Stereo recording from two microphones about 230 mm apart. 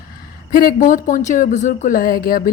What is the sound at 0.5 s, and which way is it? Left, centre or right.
A woman's voice, left.